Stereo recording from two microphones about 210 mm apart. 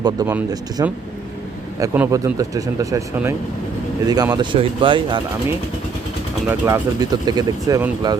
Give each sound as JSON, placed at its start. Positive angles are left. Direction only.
{"t": 0.0, "sound": "speech", "side_deg": -20}
{"t": 6.5, "sound": "speech", "side_deg": -10}